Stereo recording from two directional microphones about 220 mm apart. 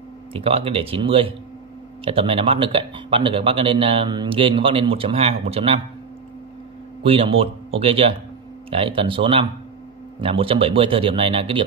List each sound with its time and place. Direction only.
0.3 s speech: 25° right (ahead or behind)
7.0 s speech: 25° right (ahead or behind)